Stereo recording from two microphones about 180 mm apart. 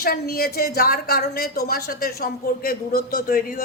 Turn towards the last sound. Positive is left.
turn(degrees=55)  # may be behind; listen again after turning